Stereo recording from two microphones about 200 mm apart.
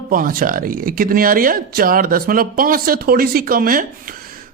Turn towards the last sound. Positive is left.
turn(degrees=-45)  # may be behind; listen again after turning